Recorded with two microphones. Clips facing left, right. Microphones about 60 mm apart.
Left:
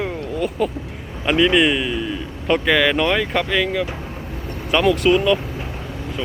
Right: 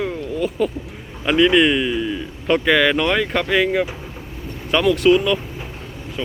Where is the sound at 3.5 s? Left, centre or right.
Centre.